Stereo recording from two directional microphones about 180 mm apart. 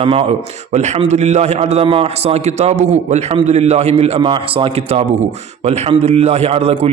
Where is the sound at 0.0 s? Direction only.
30° right (ahead or behind).